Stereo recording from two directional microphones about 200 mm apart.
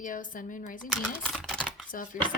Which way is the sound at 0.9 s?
Centre (ahead or behind).